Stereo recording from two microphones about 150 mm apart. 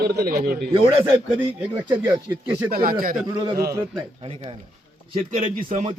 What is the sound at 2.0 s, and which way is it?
Speech, 30° right (ahead or behind).